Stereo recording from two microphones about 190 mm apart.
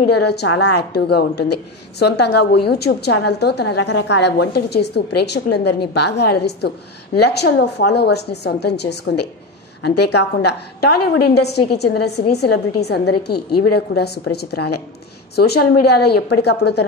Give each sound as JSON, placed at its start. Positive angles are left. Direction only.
{"t": 0.1, "sound": "a woman's voice", "side_deg": 60}